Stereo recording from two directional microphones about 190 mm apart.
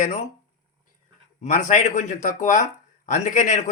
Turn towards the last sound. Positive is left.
turn(degrees=40)  # may be behind; listen again after turning